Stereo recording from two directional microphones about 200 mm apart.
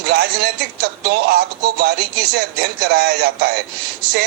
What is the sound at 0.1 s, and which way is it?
Speech, 55° right (ahead or behind).